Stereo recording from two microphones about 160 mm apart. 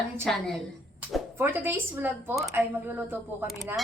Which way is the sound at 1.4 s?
15° right (ahead or behind).